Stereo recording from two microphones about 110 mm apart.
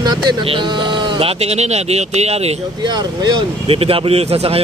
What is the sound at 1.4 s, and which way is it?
Speech, 75° right (ahead or behind).